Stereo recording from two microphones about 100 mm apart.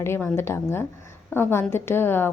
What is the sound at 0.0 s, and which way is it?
A woman's voice, 25° left (ahead or behind).